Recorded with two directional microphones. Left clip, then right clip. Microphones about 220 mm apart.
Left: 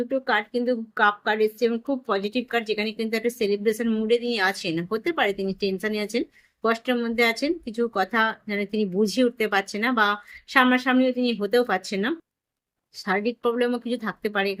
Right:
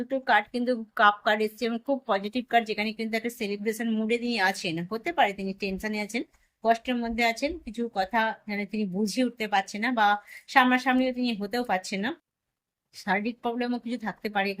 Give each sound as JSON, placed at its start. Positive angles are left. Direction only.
{"t": 0.1, "sound": "a woman's voice", "side_deg": 0}